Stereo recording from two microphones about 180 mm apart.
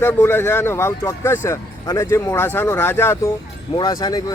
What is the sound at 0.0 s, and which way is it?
Speech, 10° left (ahead or behind).